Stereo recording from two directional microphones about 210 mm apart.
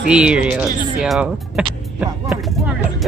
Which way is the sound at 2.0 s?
Centre (ahead or behind).